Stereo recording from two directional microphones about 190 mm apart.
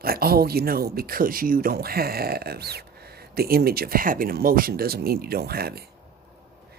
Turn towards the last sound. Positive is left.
turn(degrees=-55)  # may be behind; listen again after turning